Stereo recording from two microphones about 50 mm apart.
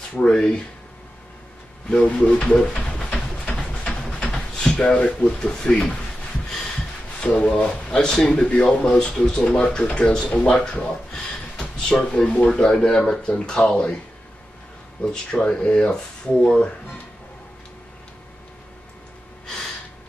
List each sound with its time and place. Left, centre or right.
0.2 s speech: centre
1.9 s pigeon: left
3.4 s a sound: left
4.6 s speech: centre
7.2 s speech: left
8.6 s speech: centre
9.2 s speech: centre
11.5 s a sound: centre
12.3 s speech: left
15.3 s speech: centre